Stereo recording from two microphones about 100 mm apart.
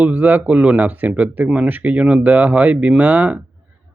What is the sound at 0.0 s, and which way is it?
Speech, 15° right (ahead or behind).